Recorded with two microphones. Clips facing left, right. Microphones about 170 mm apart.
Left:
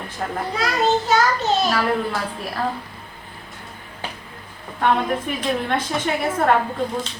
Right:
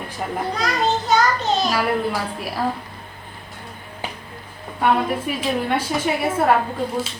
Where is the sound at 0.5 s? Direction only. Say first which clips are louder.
Left 3 dB; centre (ahead or behind).